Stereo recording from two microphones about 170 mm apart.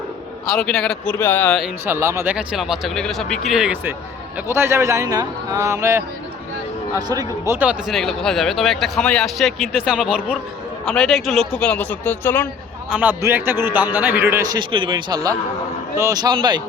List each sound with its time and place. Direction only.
0.4 s a man's voice: centre (ahead or behind)
1.8 s speech: 15° right (ahead or behind)
4.4 s a man's voice: 15° right (ahead or behind); by 12.5 s 10° left (ahead or behind)
12.9 s a man's voice: 10° right (ahead or behind); by 16.6 s 25° right (ahead or behind)